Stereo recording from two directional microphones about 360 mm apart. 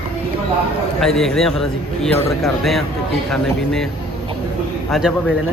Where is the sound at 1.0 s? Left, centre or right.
Centre.